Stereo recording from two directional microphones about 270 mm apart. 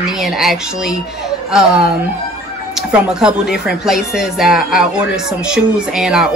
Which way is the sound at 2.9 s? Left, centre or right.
Centre.